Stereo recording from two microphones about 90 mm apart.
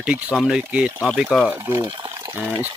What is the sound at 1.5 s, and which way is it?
Speech, 30° right (ahead or behind).